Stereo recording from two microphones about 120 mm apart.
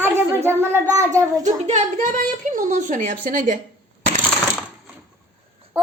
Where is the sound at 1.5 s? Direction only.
65° right (ahead or behind).